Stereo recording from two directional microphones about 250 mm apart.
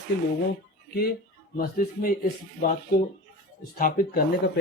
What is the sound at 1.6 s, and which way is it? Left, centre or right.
Speech, left.